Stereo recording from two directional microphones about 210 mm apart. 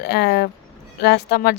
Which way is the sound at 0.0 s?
50° left (ahead or behind).